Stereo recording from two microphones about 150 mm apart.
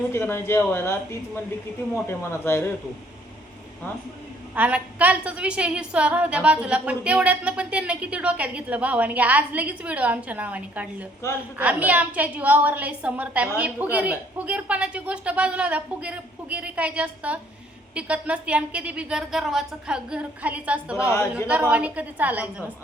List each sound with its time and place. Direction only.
0.1 s a woman's voice: 15° left (ahead or behind)
4.5 s a woman's voice: 10° right (ahead or behind)
21.1 s speech: 20° left (ahead or behind)
21.4 s a woman's voice: 10° right (ahead or behind)